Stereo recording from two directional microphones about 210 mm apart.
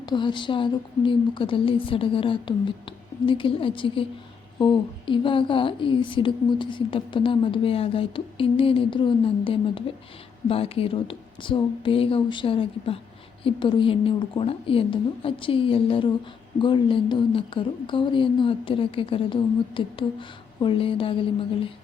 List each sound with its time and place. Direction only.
0.0 s a woman's voice: 20° left (ahead or behind)